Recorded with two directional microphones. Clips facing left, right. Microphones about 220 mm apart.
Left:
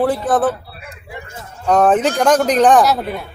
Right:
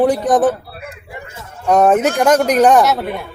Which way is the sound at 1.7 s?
10° right (ahead or behind).